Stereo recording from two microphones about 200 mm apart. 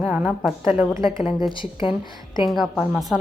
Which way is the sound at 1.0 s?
25° left (ahead or behind).